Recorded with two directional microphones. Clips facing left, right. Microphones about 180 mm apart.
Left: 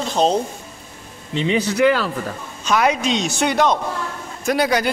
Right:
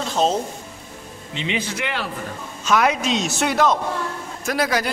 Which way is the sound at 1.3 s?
40° left (ahead or behind).